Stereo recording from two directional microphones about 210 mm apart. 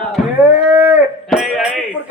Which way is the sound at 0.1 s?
10° right (ahead or behind).